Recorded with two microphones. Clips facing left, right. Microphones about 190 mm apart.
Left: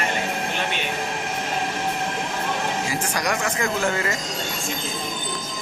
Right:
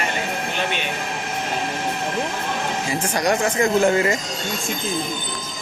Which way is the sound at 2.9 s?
25° right (ahead or behind).